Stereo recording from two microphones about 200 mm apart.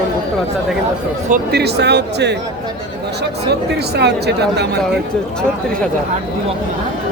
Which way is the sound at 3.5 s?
55° right (ahead or behind).